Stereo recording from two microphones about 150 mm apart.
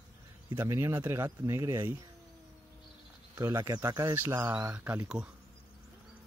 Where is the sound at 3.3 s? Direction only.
20° right (ahead or behind).